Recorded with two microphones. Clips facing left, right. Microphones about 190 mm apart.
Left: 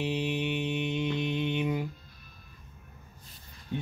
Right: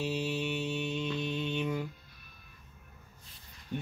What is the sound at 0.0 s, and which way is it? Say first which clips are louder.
Mantra: left 3 dB; 20° left (ahead or behind).